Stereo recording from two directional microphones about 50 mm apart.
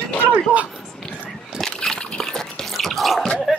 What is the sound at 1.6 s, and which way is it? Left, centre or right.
Drip, centre.